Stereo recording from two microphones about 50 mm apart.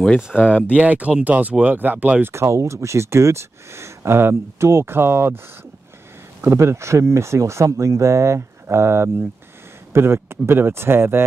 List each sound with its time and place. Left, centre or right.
0.4 s speech: left
0.7 s speech: right
2.3 s speech: right
6.4 s speech: right